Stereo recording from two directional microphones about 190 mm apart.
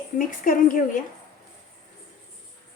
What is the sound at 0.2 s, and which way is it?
Speech, 45° left (ahead or behind).